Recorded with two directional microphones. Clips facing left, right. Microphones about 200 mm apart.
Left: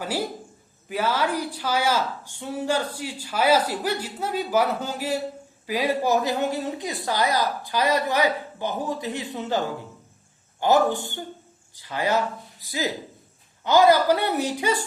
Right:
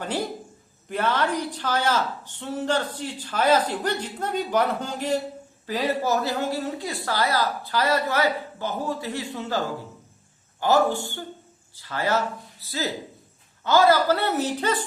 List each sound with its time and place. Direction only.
0.0 s a woman's voice: 5° left (ahead or behind)